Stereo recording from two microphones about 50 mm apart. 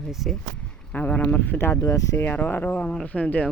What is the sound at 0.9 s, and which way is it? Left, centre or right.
Speech, left.